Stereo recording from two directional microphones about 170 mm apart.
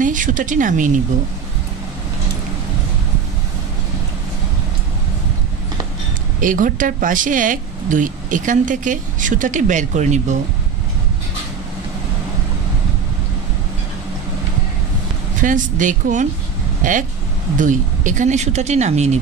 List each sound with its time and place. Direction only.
0.0 s speech: 50° right (ahead or behind)
6.4 s speech: 50° right (ahead or behind)
15.4 s speech: 50° right (ahead or behind)